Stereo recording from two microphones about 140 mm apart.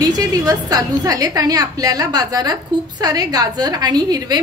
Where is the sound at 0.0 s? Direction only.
25° right (ahead or behind).